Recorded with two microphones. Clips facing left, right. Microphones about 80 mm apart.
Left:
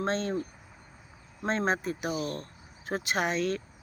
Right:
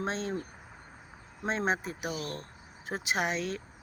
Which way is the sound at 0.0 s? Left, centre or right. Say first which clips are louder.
Left 4 dB; centre.